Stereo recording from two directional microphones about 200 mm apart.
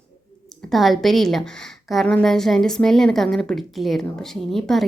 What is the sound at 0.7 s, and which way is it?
Speech, centre (ahead or behind).